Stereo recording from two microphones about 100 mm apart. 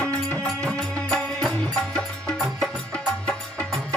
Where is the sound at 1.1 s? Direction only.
5° left (ahead or behind).